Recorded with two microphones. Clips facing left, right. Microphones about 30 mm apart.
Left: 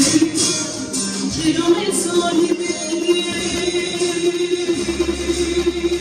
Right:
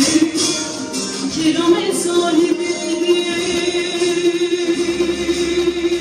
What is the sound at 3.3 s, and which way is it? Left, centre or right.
Music, centre.